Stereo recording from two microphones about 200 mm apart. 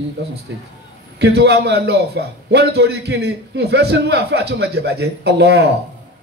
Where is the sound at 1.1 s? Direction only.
55° right (ahead or behind).